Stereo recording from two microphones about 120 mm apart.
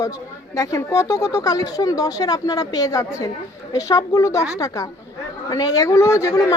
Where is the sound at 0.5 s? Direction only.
25° left (ahead or behind).